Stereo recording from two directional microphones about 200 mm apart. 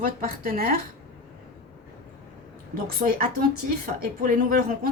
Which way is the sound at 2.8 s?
45° right (ahead or behind).